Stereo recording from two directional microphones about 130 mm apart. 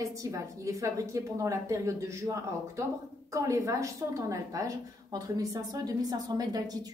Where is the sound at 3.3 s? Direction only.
25° right (ahead or behind).